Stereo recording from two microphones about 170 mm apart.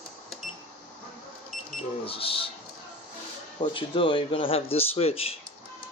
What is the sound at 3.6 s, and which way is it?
Speech, 30° left (ahead or behind).